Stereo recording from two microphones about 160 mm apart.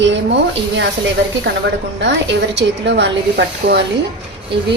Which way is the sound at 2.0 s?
90° right.